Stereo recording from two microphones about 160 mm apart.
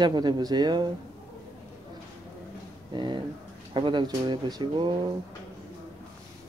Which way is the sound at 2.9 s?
30° right (ahead or behind).